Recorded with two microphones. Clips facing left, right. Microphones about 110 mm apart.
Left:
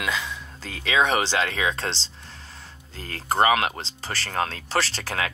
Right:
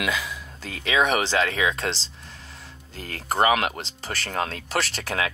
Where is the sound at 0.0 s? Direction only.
30° left (ahead or behind).